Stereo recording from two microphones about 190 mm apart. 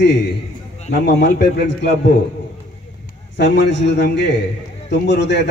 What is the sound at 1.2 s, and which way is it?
Speech, 65° left (ahead or behind).